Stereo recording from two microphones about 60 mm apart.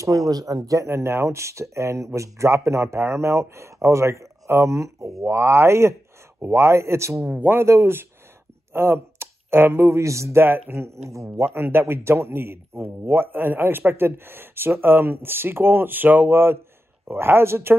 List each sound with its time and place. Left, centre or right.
0.0 s speech: right
0.8 s speech: right
7.2 s speech: right
7.5 s a man's voice: right
10.4 s a man's voice: right
11.1 s speech: right
11.4 s a man's voice: right